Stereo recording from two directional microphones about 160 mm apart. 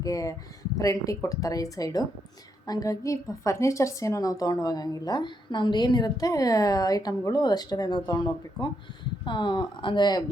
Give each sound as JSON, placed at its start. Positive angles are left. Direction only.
{"t": 0.0, "sound": "a woman's voice", "side_deg": 20}